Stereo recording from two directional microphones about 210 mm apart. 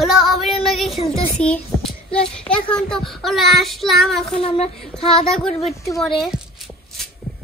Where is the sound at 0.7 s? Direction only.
Centre (ahead or behind).